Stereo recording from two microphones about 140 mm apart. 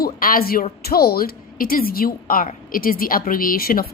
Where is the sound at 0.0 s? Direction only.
90° left.